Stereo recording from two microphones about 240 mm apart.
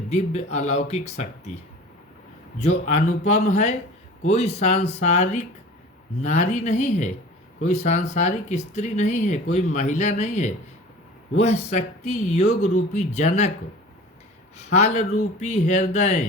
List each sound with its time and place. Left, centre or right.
0.1 s speech: left
2.6 s speech: left
14.7 s speech: left